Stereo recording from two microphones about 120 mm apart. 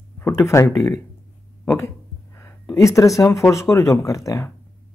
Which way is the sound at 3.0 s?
25° left (ahead or behind).